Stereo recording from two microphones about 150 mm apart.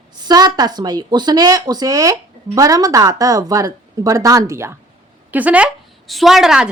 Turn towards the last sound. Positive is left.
turn(degrees=-5)  # may be behind; listen again after turning